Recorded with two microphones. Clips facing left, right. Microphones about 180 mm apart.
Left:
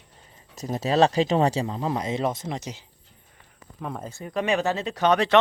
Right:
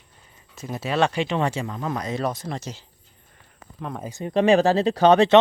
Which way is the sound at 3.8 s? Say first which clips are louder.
Right 1 dB; 5° left (ahead or behind).